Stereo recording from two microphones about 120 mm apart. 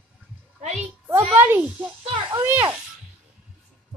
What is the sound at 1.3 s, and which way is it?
A child's voice, 15° right (ahead or behind).